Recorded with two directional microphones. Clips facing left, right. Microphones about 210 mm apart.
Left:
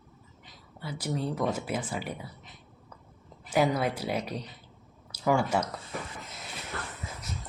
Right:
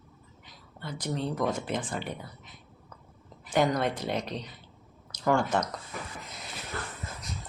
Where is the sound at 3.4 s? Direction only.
5° left (ahead or behind).